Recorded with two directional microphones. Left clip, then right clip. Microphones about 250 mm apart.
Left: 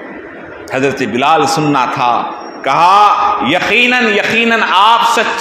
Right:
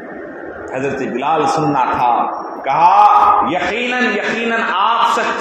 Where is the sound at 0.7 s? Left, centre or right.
Left.